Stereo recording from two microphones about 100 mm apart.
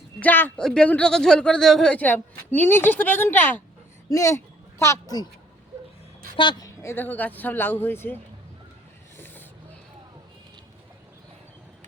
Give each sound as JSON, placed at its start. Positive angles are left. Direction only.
{"t": 0.2, "sound": "speech", "side_deg": 20}
{"t": 0.5, "sound": "speech", "side_deg": 10}
{"t": 6.3, "sound": "a woman's voice", "side_deg": 50}
{"t": 6.7, "sound": "speech", "side_deg": 25}
{"t": 9.1, "sound": "a sound", "side_deg": 20}